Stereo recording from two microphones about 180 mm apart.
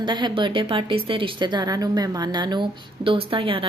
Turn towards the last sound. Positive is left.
turn(degrees=-30)  # may be behind; listen again after turning